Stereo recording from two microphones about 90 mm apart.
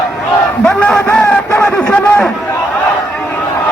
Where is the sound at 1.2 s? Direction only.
30° left (ahead or behind).